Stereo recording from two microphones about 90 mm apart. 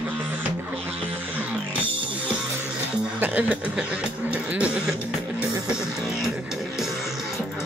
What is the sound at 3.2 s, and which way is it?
Speech, 15° right (ahead or behind).